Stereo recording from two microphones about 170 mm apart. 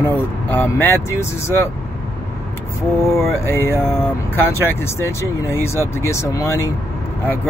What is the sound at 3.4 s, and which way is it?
Speech, 15° left (ahead or behind).